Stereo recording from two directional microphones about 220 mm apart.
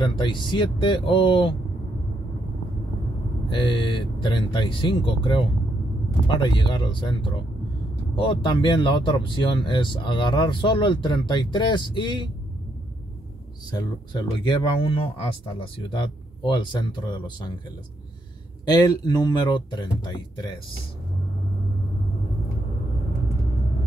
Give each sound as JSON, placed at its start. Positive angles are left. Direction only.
{"t": 0.0, "sound": "speech", "side_deg": 20}
{"t": 3.4, "sound": "speech", "side_deg": 20}
{"t": 13.7, "sound": "speech", "side_deg": 20}
{"t": 18.7, "sound": "speech", "side_deg": 15}